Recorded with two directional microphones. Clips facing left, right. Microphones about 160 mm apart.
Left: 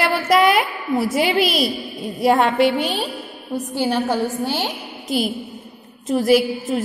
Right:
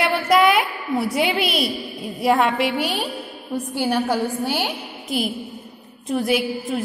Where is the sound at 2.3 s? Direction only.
30° left (ahead or behind).